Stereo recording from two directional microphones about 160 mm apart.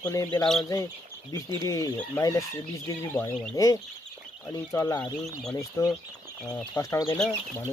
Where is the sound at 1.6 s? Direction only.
20° left (ahead or behind).